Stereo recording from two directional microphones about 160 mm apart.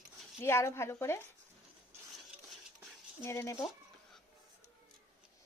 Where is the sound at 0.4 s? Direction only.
15° left (ahead or behind).